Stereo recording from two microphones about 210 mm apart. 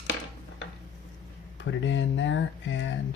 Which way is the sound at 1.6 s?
60° left (ahead or behind).